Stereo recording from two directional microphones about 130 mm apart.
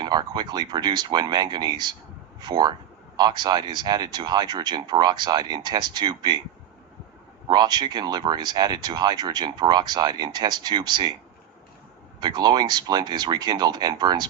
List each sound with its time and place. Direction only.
0.0 s speech: 30° right (ahead or behind)
7.4 s speech: 35° right (ahead or behind)
12.2 s speech: 35° right (ahead or behind)